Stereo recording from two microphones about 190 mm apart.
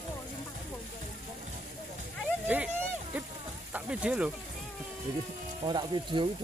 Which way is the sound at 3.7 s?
5° right (ahead or behind).